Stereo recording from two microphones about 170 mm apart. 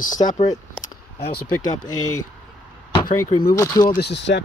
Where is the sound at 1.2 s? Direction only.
65° left (ahead or behind).